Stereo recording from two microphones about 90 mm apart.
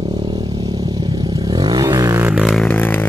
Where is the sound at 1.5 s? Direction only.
45° right (ahead or behind).